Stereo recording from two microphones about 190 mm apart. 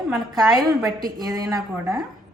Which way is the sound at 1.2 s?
20° right (ahead or behind).